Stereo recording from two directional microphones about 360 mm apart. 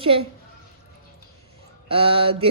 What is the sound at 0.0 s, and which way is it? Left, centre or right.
Speech, centre.